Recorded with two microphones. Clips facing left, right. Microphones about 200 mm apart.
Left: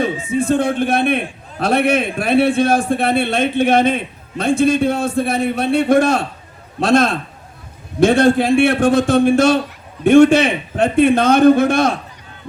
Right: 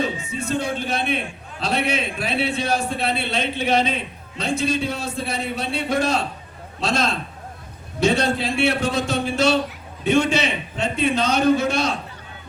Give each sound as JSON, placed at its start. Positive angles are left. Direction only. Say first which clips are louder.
{"t": 0.3, "sound": "a man's voice", "louder": "left 9 dB", "side_deg": 50}